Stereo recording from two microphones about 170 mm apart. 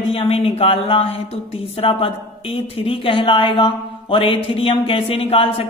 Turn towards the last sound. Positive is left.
turn(degrees=35)  # may be behind; listen again after turning